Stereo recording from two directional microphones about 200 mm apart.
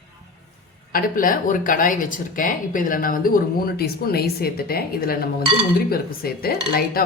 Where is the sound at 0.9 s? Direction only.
45° left (ahead or behind).